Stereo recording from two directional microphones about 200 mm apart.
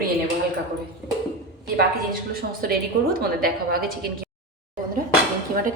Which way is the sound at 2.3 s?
50° right (ahead or behind).